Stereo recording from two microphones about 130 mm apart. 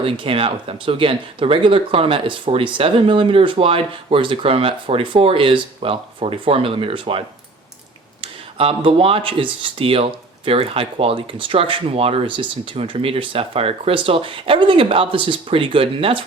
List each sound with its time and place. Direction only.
0.0 s speech: 45° right (ahead or behind)
8.2 s speech: 45° right (ahead or behind)